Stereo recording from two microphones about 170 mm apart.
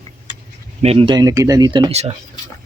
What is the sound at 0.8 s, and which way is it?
Speech, 35° right (ahead or behind).